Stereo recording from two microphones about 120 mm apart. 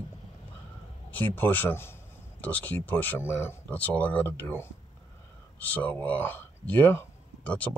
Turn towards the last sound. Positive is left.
turn(degrees=10)  # may be behind; listen again after turning